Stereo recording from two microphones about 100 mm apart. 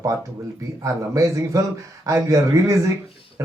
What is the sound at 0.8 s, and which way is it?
A man's voice, 30° right (ahead or behind).